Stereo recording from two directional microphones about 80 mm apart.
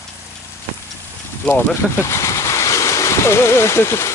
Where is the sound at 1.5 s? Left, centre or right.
Left.